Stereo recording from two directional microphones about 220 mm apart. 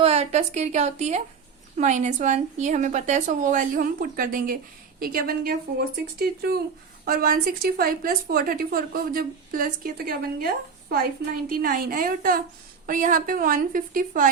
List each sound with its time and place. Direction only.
0.0 s a woman's voice: 30° right (ahead or behind)